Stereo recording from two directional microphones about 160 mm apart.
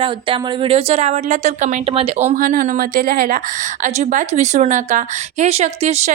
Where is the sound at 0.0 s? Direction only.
30° right (ahead or behind); by 1.8 s 50° right (ahead or behind).